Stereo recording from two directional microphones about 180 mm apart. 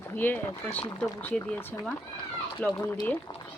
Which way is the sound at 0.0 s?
10° left (ahead or behind).